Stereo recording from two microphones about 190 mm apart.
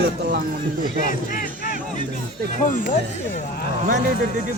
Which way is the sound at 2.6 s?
45° left (ahead or behind).